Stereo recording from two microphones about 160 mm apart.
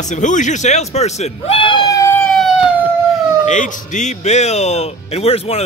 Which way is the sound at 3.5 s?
50° left (ahead or behind).